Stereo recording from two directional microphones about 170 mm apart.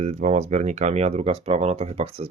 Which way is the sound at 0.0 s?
40° right (ahead or behind).